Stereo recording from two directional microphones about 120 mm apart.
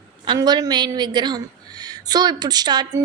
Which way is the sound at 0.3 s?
35° right (ahead or behind).